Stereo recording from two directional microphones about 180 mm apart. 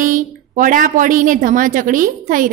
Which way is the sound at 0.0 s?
50° right (ahead or behind).